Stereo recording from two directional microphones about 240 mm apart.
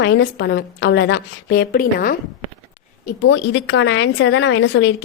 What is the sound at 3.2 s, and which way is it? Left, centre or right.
A woman's voice, left.